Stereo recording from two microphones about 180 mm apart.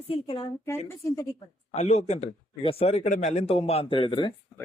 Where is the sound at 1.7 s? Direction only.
35° left (ahead or behind).